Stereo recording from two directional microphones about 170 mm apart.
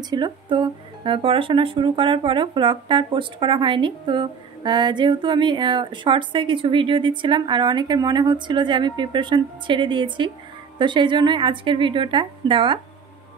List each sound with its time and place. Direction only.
0.0 s speech: 25° right (ahead or behind)